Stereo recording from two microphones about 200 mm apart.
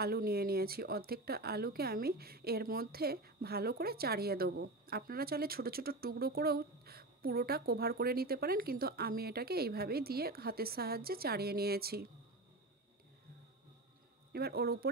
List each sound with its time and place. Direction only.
0.0 s speech: 50° right (ahead or behind)
14.3 s speech: 50° right (ahead or behind)